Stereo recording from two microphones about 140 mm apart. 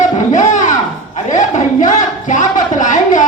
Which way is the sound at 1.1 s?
60° left (ahead or behind).